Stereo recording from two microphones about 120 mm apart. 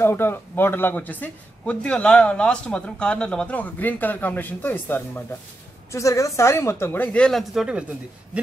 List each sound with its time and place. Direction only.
0.0 s a woman's voice: 20° left (ahead or behind); by 7.8 s 5° right (ahead or behind)